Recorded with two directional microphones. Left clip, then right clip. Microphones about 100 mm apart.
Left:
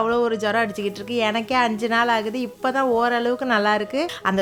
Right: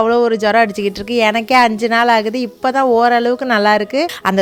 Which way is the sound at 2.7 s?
55° right (ahead or behind).